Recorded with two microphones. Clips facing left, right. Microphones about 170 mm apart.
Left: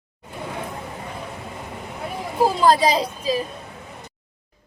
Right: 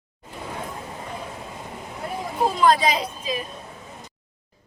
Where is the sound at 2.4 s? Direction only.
35° left (ahead or behind).